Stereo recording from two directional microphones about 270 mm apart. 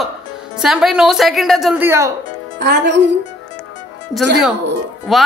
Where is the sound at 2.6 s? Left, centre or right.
Right.